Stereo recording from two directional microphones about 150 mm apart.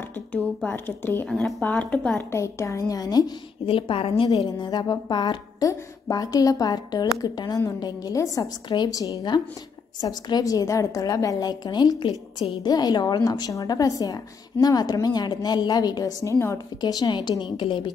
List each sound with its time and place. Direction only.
0.3 s speech: 10° left (ahead or behind)
2.3 s a woman's voice: 20° left (ahead or behind); by 17.9 s 35° left (ahead or behind)